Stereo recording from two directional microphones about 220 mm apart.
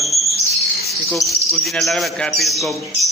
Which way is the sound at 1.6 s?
Centre (ahead or behind).